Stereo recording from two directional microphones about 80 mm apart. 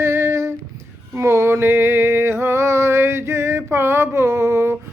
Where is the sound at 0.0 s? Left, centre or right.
Right.